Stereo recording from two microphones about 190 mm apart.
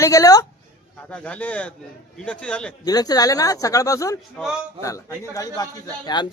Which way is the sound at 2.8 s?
20° left (ahead or behind).